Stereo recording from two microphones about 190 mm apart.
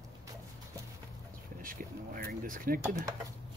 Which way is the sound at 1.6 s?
50° right (ahead or behind).